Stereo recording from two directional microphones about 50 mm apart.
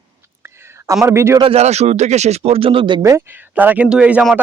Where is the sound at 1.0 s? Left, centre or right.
Right.